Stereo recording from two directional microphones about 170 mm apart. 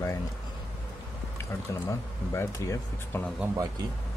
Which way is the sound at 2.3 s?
15° left (ahead or behind).